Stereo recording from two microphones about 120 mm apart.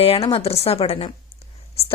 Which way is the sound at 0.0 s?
55° left (ahead or behind).